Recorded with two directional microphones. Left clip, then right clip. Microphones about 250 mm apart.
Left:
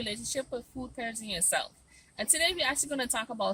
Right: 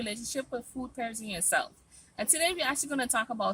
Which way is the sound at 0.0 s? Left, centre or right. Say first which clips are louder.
Left 1 dB; right.